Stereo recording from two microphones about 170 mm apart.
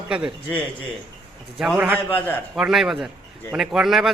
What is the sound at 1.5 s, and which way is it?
A man's voice, centre (ahead or behind).